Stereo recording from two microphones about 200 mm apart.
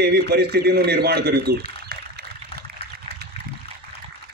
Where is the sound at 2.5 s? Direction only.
30° left (ahead or behind).